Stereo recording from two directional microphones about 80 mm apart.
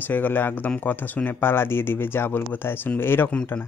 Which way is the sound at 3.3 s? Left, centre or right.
Centre.